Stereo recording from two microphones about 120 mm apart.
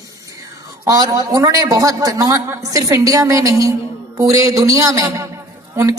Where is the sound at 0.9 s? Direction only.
30° right (ahead or behind).